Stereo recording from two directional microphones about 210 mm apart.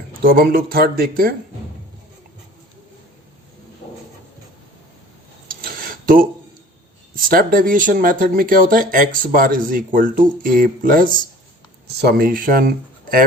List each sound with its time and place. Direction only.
0.3 s speech: 45° right (ahead or behind)
5.5 s cutlery: 45° right (ahead or behind)
7.2 s speech: 40° right (ahead or behind)